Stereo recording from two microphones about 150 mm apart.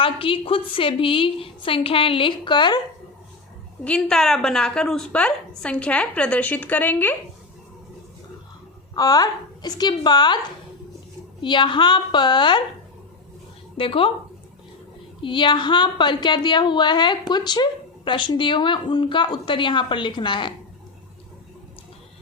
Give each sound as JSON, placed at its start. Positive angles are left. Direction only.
{"t": 0.0, "sound": "a woman's voice", "side_deg": 35}
{"t": 3.8, "sound": "a woman's voice", "side_deg": 5}
{"t": 9.0, "sound": "a woman's voice", "side_deg": 25}
{"t": 11.3, "sound": "a woman's voice", "side_deg": 30}
{"t": 13.7, "sound": "a woman's voice", "side_deg": 35}
{"t": 15.2, "sound": "a woman's voice", "side_deg": 35}